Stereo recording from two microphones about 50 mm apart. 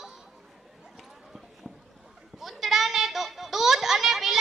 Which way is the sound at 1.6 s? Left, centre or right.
Right.